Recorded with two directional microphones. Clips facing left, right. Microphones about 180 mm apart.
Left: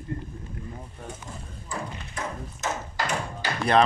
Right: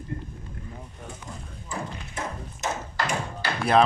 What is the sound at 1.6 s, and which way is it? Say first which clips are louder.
Thump: right 1 dB; 25° right (ahead or behind).